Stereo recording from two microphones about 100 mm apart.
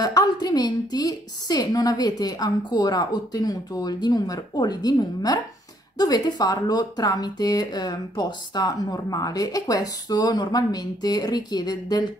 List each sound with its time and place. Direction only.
0.0 s speech: 40° left (ahead or behind)